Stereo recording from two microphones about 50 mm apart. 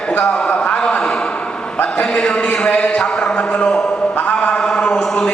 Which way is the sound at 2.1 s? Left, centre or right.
Centre.